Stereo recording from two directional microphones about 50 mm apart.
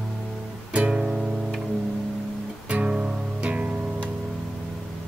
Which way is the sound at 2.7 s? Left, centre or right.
Right.